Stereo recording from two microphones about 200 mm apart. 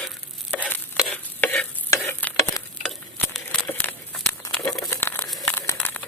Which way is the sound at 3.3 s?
5° left (ahead or behind).